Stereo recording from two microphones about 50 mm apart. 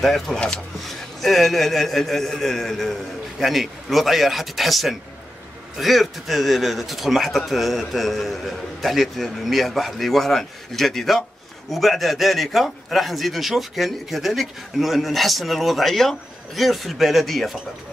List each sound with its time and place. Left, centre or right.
0.0 s speech: centre